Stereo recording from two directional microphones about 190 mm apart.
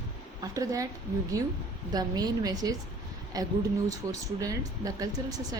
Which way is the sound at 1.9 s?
20° right (ahead or behind).